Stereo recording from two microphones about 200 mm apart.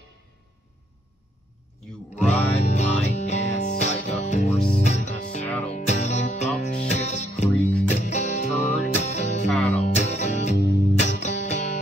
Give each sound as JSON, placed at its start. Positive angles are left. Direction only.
{"t": 2.1, "sound": "music", "side_deg": 35}
{"t": 10.5, "sound": "music", "side_deg": 55}
{"t": 11.1, "sound": "music", "side_deg": 35}